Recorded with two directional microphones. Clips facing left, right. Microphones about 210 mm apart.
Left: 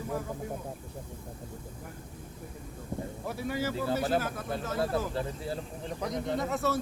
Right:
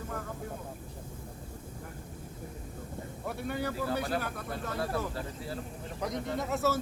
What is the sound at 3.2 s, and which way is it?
Speech, centre (ahead or behind).